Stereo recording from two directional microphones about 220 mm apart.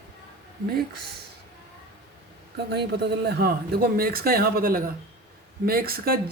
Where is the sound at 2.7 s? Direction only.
50° right (ahead or behind).